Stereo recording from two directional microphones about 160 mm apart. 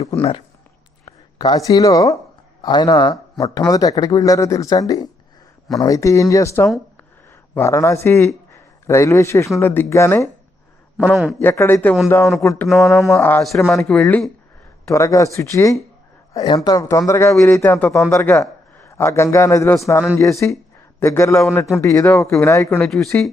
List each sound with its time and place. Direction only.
0.2 s a man's voice: 35° left (ahead or behind); by 10.2 s 15° left (ahead or behind)
10.9 s a man's voice: 10° right (ahead or behind)
11.4 s a man's voice: 15° left (ahead or behind)
12.6 s a man's voice: centre (ahead or behind)
13.1 s a man's voice: 15° left (ahead or behind)
14.8 s a man's voice: 20° left (ahead or behind)
22.1 s a man's voice: centre (ahead or behind)
22.4 s speech: 20° left (ahead or behind)
22.8 s a man's voice: centre (ahead or behind)